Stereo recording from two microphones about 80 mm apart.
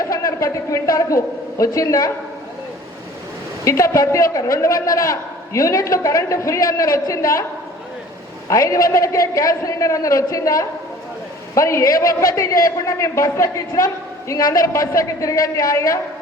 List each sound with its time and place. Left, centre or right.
0.1 s a man's voice: left
3.6 s a man's voice: left
8.4 s a man's voice: left